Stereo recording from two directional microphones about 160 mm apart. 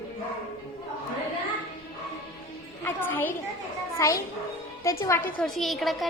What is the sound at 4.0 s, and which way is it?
Speech, 20° left (ahead or behind).